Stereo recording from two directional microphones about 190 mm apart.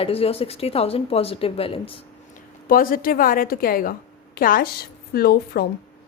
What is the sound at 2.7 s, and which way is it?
A woman's voice, 50° left (ahead or behind).